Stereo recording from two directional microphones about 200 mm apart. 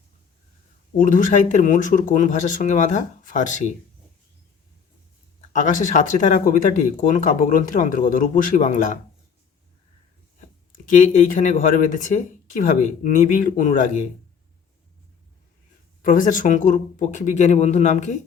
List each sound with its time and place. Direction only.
0.9 s speech: 40° left (ahead or behind)
5.5 s speech: 40° left (ahead or behind)
10.7 s speech: 40° left (ahead or behind)
16.0 s speech: 40° left (ahead or behind)